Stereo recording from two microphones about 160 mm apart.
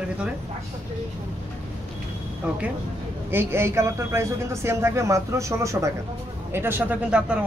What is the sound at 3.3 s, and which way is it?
A man's voice, 15° right (ahead or behind).